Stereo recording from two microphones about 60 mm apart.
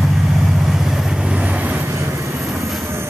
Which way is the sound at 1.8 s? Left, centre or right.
Right.